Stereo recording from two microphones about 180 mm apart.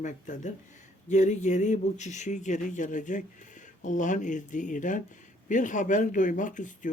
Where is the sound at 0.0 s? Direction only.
45° left (ahead or behind).